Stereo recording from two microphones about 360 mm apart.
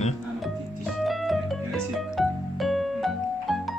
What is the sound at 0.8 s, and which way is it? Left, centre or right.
Music, centre.